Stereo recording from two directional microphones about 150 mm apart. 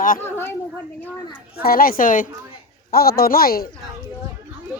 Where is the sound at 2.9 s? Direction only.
90° left.